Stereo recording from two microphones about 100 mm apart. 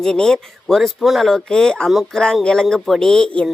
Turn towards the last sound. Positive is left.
turn(degrees=10)  # may be behind; listen again after turning